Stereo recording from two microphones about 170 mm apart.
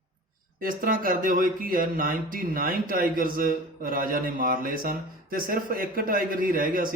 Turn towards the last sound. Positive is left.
turn(degrees=-55)  # may be behind; listen again after turning